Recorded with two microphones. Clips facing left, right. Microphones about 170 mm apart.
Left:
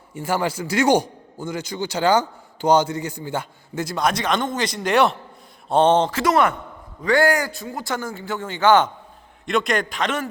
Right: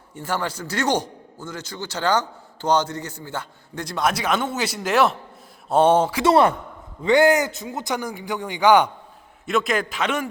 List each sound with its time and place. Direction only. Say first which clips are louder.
0.1 s a man's voice: left 4 dB; 10° left (ahead or behind); by 6.2 s 10° right (ahead or behind)
6.2 s a man's voice: right 4 dB; 30° right (ahead or behind)
7.0 s a man's voice: right 2 dB; 20° right (ahead or behind)